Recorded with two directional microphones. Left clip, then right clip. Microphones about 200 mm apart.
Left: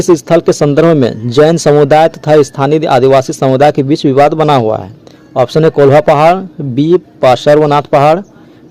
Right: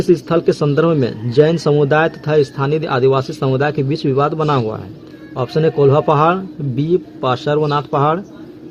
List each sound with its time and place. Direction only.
0.0 s speech: 45° left (ahead or behind)